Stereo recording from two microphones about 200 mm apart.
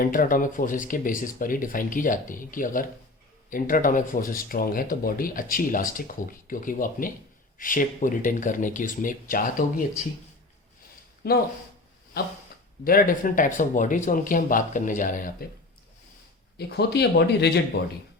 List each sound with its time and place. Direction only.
0.0 s speech: 45° left (ahead or behind)
11.2 s speech: 55° left (ahead or behind)
12.8 s speech: 45° left (ahead or behind)
16.6 s speech: 55° left (ahead or behind)